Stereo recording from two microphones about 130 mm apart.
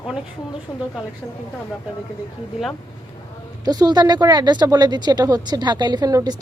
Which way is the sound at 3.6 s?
30° right (ahead or behind).